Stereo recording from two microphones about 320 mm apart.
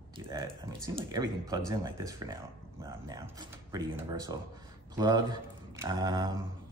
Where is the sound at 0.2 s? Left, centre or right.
Centre.